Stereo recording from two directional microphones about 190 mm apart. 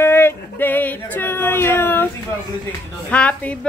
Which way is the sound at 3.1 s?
5° left (ahead or behind).